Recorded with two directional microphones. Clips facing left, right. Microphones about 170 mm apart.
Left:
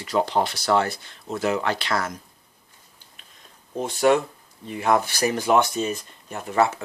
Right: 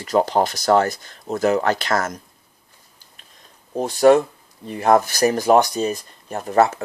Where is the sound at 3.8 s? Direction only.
40° right (ahead or behind).